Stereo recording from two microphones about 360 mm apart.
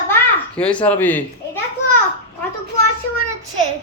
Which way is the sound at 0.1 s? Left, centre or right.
Centre.